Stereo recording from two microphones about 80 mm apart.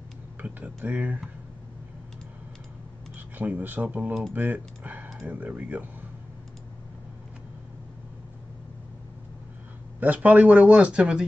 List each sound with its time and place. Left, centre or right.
0.4 s speech: right
3.2 s speech: right
9.9 s speech: right